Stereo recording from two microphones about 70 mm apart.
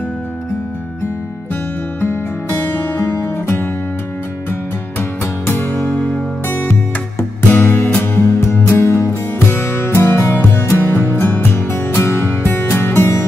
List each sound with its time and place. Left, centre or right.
1.5 s music: left